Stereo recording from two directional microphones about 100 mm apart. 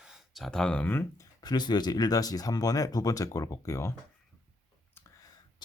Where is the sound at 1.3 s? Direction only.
45° left (ahead or behind); by 3.9 s 30° left (ahead or behind).